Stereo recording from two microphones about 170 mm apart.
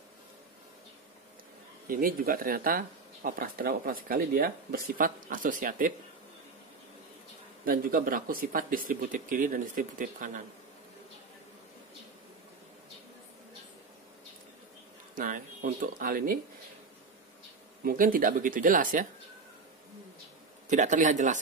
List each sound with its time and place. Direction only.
1.9 s speech: 55° right (ahead or behind)
7.6 s speech: 55° right (ahead or behind)
15.1 s speech: 50° right (ahead or behind)
17.8 s speech: 55° right (ahead or behind)
20.6 s speech: 45° right (ahead or behind)